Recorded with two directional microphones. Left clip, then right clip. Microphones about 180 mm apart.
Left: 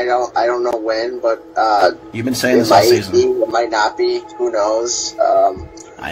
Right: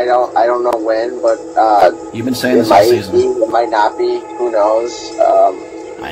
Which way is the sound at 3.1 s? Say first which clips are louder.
Right 2 dB; 15° left (ahead or behind).